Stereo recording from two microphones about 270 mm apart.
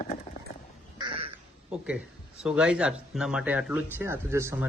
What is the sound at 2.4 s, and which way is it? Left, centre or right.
Speech, centre.